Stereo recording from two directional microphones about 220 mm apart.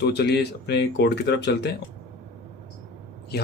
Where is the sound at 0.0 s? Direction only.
50° left (ahead or behind).